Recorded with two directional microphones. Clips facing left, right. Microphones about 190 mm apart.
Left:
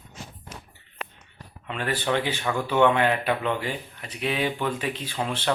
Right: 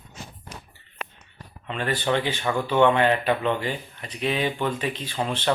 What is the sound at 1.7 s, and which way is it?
Speech, 10° left (ahead or behind).